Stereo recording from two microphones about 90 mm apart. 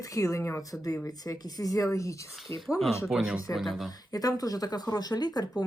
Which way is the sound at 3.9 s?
45° left (ahead or behind).